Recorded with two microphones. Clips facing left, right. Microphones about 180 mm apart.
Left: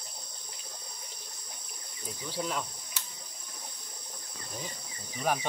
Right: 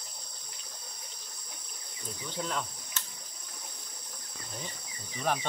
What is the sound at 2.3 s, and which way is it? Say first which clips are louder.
Speech: left 1 dB; 10° left (ahead or behind).